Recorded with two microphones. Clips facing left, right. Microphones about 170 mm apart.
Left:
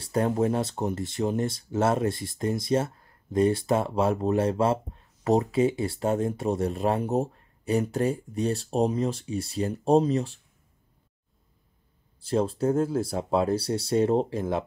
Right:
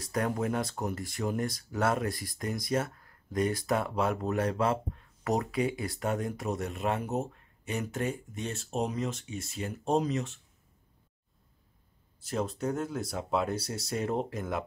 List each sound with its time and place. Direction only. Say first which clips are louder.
0.0 s speech: left 6 dB; 30° left (ahead or behind)
12.2 s speech: left 7 dB; 30° left (ahead or behind)